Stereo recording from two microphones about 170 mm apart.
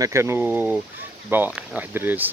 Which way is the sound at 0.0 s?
15° right (ahead or behind).